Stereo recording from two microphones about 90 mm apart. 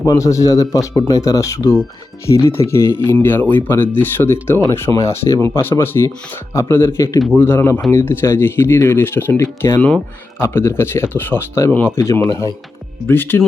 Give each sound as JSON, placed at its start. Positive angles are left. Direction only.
{"t": 0.0, "sound": "speech", "side_deg": 40}
{"t": 12.3, "sound": "speech", "side_deg": 40}
{"t": 13.1, "sound": "speech", "side_deg": 25}